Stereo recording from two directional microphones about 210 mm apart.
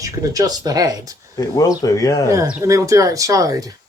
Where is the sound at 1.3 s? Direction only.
15° left (ahead or behind).